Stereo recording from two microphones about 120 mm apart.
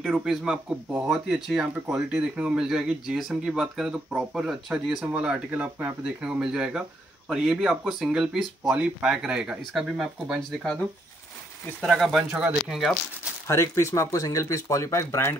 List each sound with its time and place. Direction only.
0.0 s speech: 5° right (ahead or behind)
10.6 s speech: 5° left (ahead or behind)
13.5 s speech: 20° left (ahead or behind)